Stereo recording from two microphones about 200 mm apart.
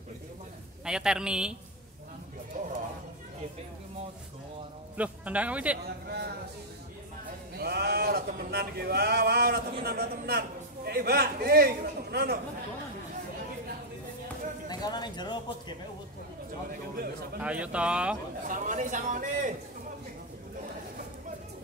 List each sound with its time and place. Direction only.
0.8 s a man's voice: 5° right (ahead or behind)
4.9 s a man's voice: 5° right (ahead or behind)
6.0 s music: 55° right (ahead or behind)
7.5 s speech: 50° right (ahead or behind)
14.7 s speech: 20° left (ahead or behind)
16.9 s speech: 50° right (ahead or behind)
17.4 s a man's voice: 5° right (ahead or behind)
18.5 s a man's voice: 40° right (ahead or behind)